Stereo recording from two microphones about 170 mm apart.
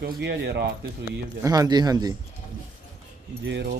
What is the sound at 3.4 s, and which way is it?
Speech, 90° right.